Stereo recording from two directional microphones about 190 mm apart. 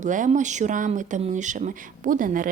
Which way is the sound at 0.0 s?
40° right (ahead or behind).